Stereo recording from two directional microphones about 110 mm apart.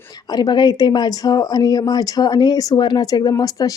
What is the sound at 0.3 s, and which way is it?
A woman's voice, 40° left (ahead or behind).